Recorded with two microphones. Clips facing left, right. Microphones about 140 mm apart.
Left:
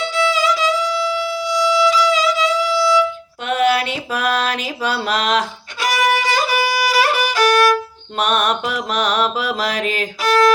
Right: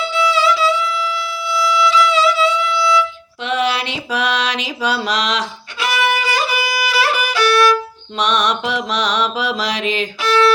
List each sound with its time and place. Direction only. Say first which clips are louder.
0.0 s music: right 1 dB; 40° left (ahead or behind)
3.4 s a sound: left 2 dB; 50° left (ahead or behind)
8.2 s mantra: even; 50° left (ahead or behind)